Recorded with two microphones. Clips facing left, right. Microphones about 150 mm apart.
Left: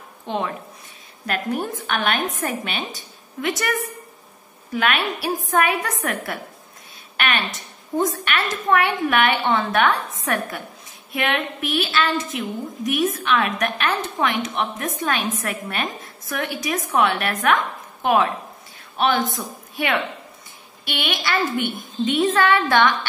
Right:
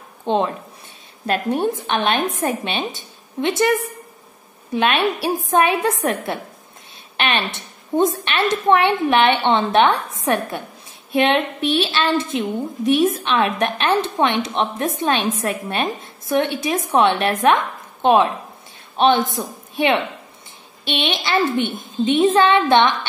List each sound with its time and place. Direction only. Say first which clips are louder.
0.2 s a woman's voice: right 6 dB; 30° right (ahead or behind)